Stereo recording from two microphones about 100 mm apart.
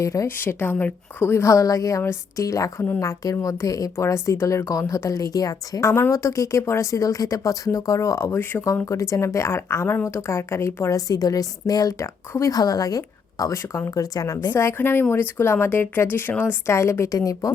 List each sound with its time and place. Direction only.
0.0 s speech: 35° left (ahead or behind)
0.3 s a woman's voice: 20° left (ahead or behind); by 14.5 s 40° left (ahead or behind)
14.5 s a woman's voice: 25° left (ahead or behind)